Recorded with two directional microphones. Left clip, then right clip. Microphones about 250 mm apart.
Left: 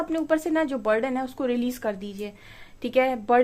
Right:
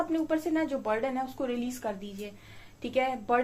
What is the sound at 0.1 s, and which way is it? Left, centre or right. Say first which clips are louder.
Speech: left 5 dB; left.